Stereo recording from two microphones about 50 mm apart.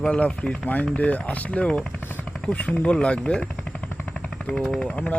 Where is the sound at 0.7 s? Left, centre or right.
Left.